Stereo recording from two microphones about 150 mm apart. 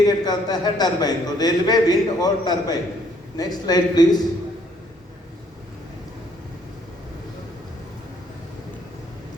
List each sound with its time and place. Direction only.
0.0 s a man's voice: 25° left (ahead or behind)